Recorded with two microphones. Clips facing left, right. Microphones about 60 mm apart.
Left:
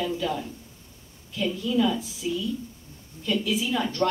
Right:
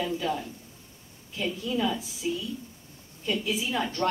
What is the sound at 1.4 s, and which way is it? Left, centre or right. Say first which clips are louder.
Speech: left 4 dB; right.